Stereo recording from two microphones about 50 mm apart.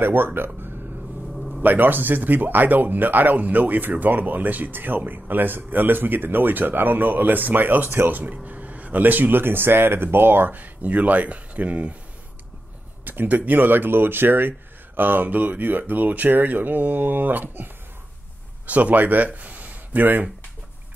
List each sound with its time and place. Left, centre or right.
0.0 s speech: right
1.3 s a sound: centre
1.6 s speech: right
13.0 s speech: right
18.7 s speech: right